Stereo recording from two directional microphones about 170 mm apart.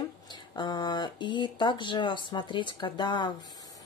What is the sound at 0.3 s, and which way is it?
A woman's voice, 25° left (ahead or behind).